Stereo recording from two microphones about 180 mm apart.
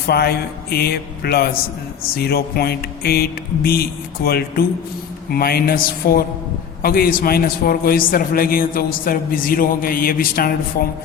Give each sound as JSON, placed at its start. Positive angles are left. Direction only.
{"t": 0.1, "sound": "a man's voice", "side_deg": 60}